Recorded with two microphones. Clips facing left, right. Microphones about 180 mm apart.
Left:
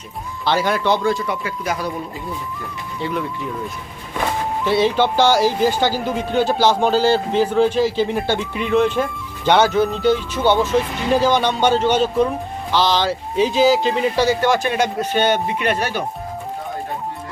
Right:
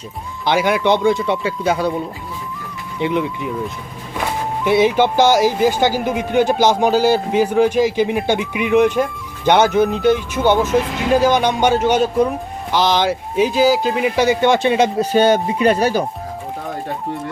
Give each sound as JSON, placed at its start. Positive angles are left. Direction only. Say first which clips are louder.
{"t": 0.4, "sound": "speech", "louder": "right 3 dB", "side_deg": -15}
{"t": 3.0, "sound": "speech", "louder": "right 5 dB", "side_deg": -20}
{"t": 4.6, "sound": "speech", "louder": "right 3 dB", "side_deg": -15}
{"t": 14.2, "sound": "speech", "louder": "right 5 dB", "side_deg": -20}
{"t": 15.1, "sound": "speech", "louder": "right 5 dB", "side_deg": -35}